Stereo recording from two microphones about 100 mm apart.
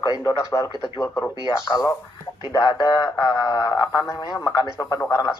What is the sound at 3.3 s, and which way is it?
Speech, 45° left (ahead or behind).